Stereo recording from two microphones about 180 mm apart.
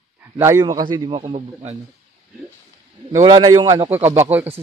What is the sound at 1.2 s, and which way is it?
Speech, 35° right (ahead or behind).